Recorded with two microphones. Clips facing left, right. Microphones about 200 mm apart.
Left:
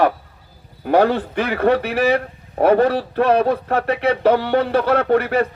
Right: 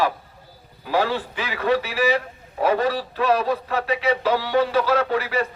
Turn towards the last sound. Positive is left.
turn(degrees=60)  # may be behind; listen again after turning